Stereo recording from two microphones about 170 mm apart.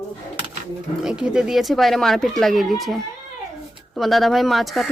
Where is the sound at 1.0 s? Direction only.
5° right (ahead or behind).